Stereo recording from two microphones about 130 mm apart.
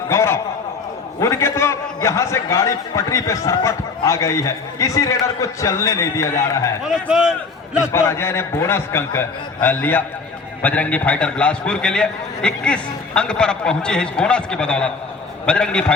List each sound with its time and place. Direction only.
0.1 s a man's voice: 20° left (ahead or behind)
6.8 s a man's voice: 5° right (ahead or behind)
7.9 s a man's voice: 20° left (ahead or behind)